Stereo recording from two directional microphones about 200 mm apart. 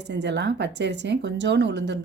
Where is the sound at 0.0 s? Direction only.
60° right (ahead or behind).